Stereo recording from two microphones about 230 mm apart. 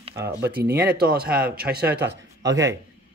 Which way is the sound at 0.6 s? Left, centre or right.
Right.